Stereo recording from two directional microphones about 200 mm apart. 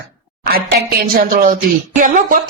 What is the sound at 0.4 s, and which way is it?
A woman's voice, 50° right (ahead or behind).